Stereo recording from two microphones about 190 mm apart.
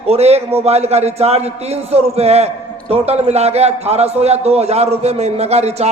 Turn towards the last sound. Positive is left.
turn(degrees=-35)  # may be behind; listen again after turning